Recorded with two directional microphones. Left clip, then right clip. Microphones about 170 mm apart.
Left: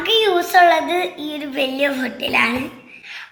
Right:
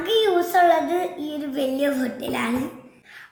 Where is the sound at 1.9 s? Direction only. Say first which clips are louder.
Left 5 dB; 30° right (ahead or behind).